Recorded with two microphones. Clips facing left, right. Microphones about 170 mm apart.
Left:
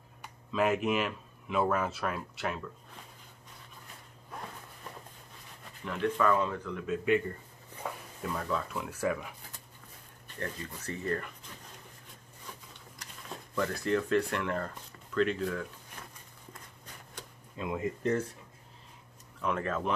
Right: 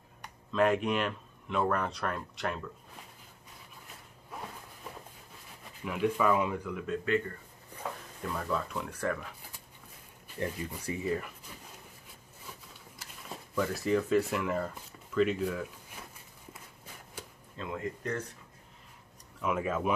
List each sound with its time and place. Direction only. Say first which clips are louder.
0.2 s speech: right 2 dB; 5° left (ahead or behind)
4.3 s a sound: even; 5° right (ahead or behind)
5.6 s speech: right 2 dB; 10° right (ahead or behind)
8.2 s speech: even; centre (ahead or behind)
10.2 s speech: right 4 dB; 10° right (ahead or behind)
13.0 s speech: even; 5° right (ahead or behind)
16.5 s walk: even; 5° right (ahead or behind)
17.6 s speech: left 3 dB; 15° left (ahead or behind)
19.4 s speech: right 1 dB; 10° right (ahead or behind)